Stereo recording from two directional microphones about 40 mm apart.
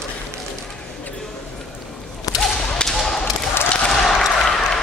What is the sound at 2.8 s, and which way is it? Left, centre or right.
Whip, left.